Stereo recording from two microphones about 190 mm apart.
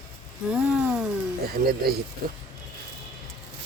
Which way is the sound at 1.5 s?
55° right (ahead or behind).